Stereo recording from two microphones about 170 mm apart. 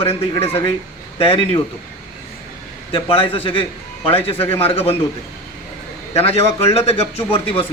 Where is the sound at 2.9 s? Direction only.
30° left (ahead or behind).